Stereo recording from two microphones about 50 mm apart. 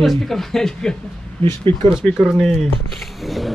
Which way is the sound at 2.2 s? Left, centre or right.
Right.